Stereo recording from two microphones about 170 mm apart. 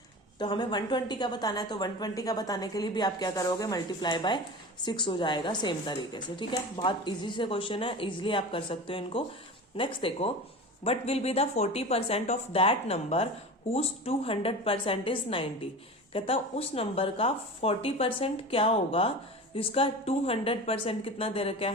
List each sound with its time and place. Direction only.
0.3 s a woman's voice: 25° left (ahead or behind)